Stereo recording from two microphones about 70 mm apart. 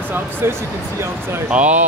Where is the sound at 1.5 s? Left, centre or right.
Centre.